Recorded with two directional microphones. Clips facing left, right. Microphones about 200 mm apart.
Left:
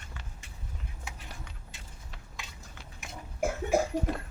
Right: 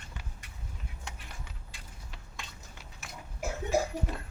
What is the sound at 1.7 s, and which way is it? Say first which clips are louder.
Keys jangling: left 1 dB; 25° left (ahead or behind).